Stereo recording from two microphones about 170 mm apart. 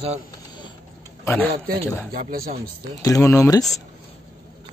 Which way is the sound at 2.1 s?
60° right (ahead or behind).